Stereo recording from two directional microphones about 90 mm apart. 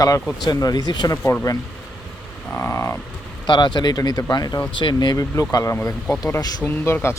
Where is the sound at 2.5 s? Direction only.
30° left (ahead or behind).